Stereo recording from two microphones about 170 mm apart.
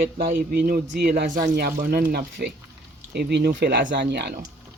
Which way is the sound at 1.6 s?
65° right (ahead or behind).